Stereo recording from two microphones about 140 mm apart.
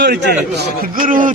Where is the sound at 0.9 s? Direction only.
75° right (ahead or behind).